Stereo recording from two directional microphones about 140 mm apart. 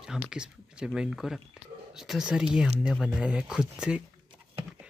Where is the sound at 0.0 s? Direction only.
5° right (ahead or behind).